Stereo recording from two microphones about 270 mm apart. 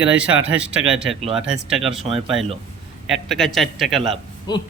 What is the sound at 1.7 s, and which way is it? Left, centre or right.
Speech, centre.